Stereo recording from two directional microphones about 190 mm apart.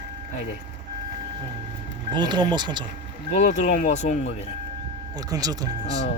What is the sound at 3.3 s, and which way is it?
Speech, 40° left (ahead or behind).